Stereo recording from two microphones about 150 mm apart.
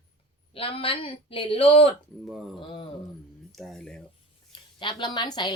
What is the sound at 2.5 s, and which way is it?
Speech, 35° left (ahead or behind).